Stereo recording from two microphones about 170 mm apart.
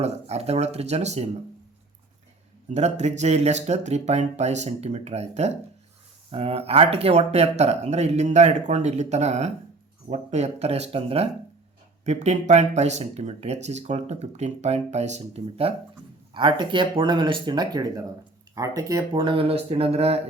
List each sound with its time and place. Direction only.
0.0 s speech: 40° right (ahead or behind)
2.6 s speech: 40° right (ahead or behind)